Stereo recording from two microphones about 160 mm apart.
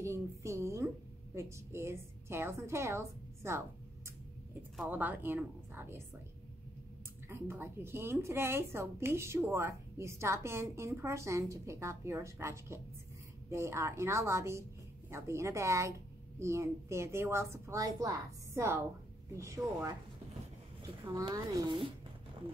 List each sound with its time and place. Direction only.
0.0 s a sound: 20° right (ahead or behind)
1.3 s a woman's voice: 15° right (ahead or behind)
4.7 s a woman's voice: 10° right (ahead or behind)
7.2 s a woman's voice: 15° right (ahead or behind)